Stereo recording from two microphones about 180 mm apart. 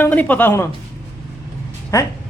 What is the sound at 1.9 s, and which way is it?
Speech, 15° left (ahead or behind).